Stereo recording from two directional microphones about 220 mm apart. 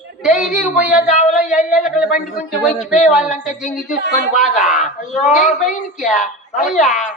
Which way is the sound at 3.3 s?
35° left (ahead or behind).